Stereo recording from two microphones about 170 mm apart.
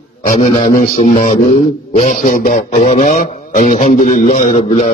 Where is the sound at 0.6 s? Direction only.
50° left (ahead or behind).